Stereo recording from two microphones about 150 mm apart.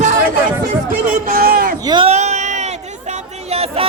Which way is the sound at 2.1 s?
50° right (ahead or behind).